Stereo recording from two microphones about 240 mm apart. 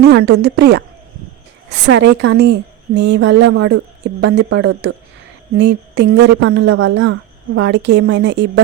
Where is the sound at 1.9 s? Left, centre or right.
Right.